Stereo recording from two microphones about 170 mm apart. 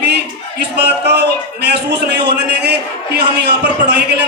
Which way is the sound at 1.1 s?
80° right.